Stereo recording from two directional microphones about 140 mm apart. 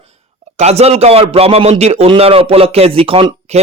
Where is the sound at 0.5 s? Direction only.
50° right (ahead or behind).